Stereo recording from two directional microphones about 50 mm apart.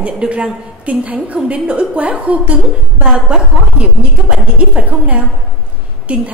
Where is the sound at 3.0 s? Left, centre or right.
Centre.